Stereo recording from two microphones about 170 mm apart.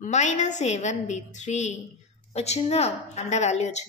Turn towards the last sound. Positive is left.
turn(degrees=40)  # may be behind; listen again after turning